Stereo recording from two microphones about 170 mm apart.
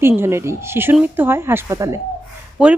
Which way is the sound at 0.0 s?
15° right (ahead or behind).